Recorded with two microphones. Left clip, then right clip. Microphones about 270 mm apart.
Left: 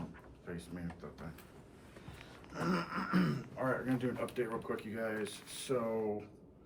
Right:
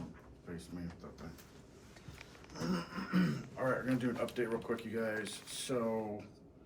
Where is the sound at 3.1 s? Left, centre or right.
Centre.